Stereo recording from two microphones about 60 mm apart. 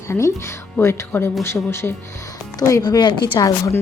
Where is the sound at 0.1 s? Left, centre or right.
Left.